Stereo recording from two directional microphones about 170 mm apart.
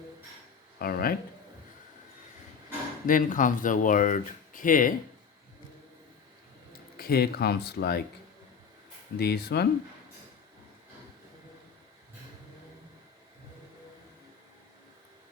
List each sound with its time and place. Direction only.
0.8 s speech: 60° left (ahead or behind)
3.1 s speech: 50° left (ahead or behind)
6.9 s speech: 65° left (ahead or behind)
9.1 s speech: 70° left (ahead or behind)